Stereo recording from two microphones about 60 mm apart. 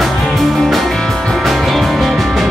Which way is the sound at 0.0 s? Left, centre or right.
Centre.